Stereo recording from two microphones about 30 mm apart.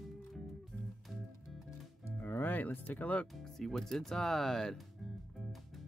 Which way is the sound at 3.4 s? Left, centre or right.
Centre.